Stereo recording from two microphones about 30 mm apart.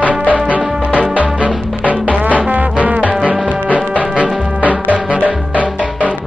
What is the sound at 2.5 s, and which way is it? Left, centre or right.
Music, right.